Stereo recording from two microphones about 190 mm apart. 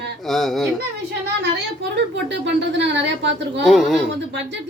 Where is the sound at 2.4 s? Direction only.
65° right (ahead or behind).